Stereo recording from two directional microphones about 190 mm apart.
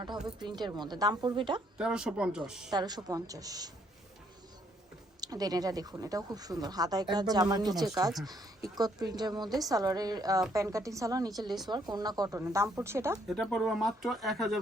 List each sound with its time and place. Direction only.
0.3 s speech: 25° right (ahead or behind)
1.8 s speech: 5° right (ahead or behind)
2.6 s speech: 20° right (ahead or behind)
5.2 s a woman's voice: 20° right (ahead or behind)
13.2 s speech: centre (ahead or behind)